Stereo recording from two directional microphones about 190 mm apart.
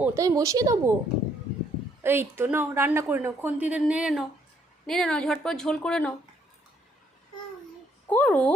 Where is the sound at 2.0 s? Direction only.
10° right (ahead or behind); by 6.1 s 5° left (ahead or behind).